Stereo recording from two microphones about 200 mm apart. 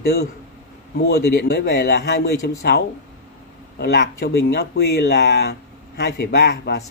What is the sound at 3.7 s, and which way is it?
Speech, 55° left (ahead or behind).